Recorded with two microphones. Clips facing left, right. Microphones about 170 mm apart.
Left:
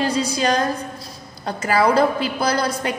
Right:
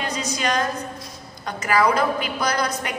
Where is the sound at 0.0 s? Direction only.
30° left (ahead or behind).